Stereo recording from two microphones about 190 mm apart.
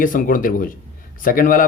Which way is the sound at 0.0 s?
45° left (ahead or behind).